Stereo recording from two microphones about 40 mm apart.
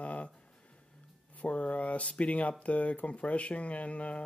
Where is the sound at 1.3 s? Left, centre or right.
Left.